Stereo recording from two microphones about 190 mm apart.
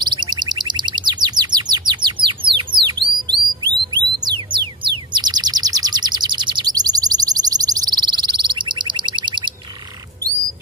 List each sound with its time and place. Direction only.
0.1 s bird: 20° right (ahead or behind)
4.2 s music: 25° right (ahead or behind)
5.1 s bird: 20° right (ahead or behind)